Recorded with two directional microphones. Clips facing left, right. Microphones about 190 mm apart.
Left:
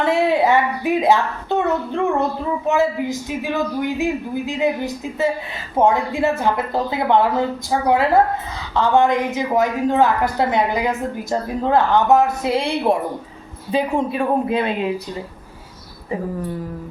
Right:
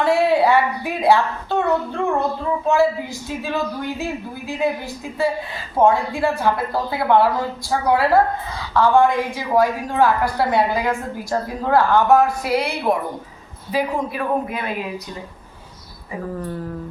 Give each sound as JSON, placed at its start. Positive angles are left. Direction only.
{"t": 0.0, "sound": "a man's voice", "side_deg": 20}
{"t": 5.8, "sound": "a woman's voice", "side_deg": 20}